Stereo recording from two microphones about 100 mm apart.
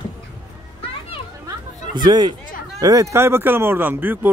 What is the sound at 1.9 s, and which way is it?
Speech, 45° right (ahead or behind).